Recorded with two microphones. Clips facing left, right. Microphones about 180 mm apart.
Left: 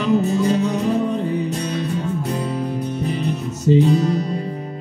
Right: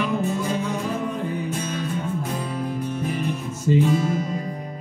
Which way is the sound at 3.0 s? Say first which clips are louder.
Left 3 dB; 70° left (ahead or behind).